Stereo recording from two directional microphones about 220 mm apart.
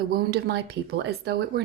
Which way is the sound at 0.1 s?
45° right (ahead or behind).